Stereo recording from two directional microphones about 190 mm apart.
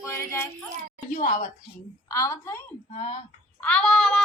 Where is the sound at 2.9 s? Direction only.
35° left (ahead or behind).